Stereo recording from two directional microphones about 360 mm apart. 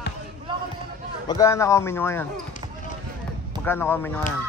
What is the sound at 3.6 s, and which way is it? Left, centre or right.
Speech, centre.